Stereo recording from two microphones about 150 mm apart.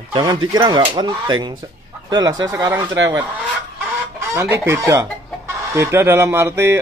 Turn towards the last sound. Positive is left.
turn(degrees=-15)  # may be behind; listen again after turning